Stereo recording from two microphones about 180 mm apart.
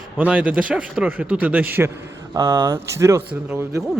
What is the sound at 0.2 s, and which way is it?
Speech, 10° right (ahead or behind).